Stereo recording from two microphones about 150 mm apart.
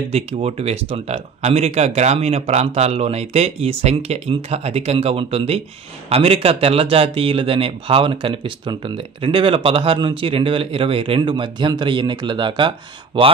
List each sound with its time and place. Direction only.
0.1 s speech: 45° right (ahead or behind)